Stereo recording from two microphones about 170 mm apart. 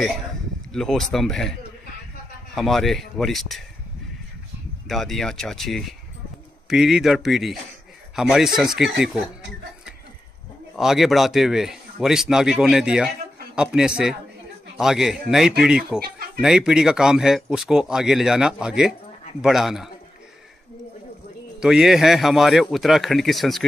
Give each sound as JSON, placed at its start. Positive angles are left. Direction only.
{"t": 0.7, "sound": "a man's voice", "side_deg": 5}
{"t": 2.5, "sound": "a man's voice", "side_deg": 0}
{"t": 4.8, "sound": "a man's voice", "side_deg": 0}
{"t": 10.8, "sound": "a man's voice", "side_deg": 0}
{"t": 21.5, "sound": "a man's voice", "side_deg": -5}